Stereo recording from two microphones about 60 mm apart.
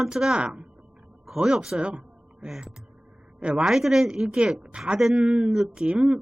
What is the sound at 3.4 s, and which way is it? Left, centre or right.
Speech, centre.